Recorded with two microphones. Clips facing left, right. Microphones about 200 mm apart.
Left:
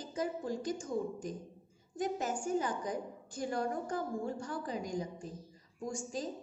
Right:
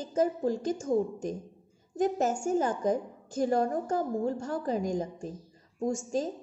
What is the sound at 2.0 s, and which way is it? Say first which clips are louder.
A woman's voice: right 8 dB; 45° right (ahead or behind).